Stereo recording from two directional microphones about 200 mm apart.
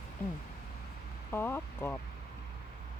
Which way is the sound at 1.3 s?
10° left (ahead or behind).